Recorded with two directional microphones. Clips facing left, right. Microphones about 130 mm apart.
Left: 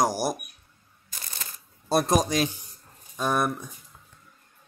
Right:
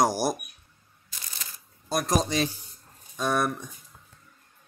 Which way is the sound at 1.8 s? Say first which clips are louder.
Left 5 dB; 30° left (ahead or behind).